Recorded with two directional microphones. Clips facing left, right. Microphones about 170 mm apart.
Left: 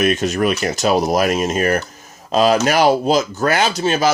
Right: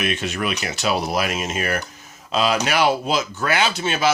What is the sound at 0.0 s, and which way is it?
Speech, 40° left (ahead or behind).